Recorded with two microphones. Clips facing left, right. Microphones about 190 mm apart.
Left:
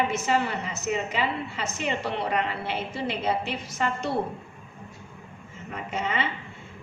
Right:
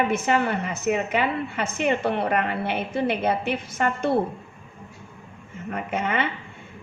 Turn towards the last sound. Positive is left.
turn(degrees=-55)  # may be behind; listen again after turning